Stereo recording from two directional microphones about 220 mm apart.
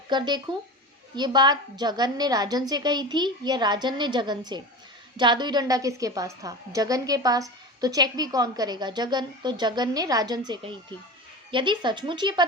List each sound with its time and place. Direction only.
0.1 s a woman's voice: 20° right (ahead or behind)